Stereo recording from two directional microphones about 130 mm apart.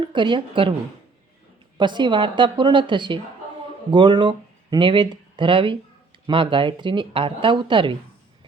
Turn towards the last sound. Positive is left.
turn(degrees=-40)  # may be behind; listen again after turning